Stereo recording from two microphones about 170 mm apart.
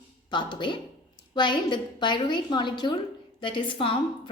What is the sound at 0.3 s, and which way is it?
A woman's voice, 25° left (ahead or behind).